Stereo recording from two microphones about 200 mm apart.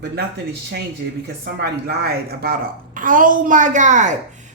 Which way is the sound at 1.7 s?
55° right (ahead or behind).